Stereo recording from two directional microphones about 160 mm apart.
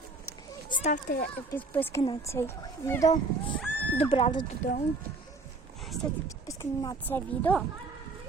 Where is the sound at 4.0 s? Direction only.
35° left (ahead or behind).